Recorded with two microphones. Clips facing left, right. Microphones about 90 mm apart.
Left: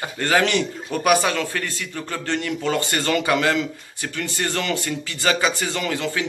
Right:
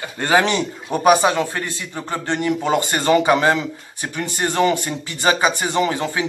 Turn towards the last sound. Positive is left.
turn(degrees=-20)  # may be behind; listen again after turning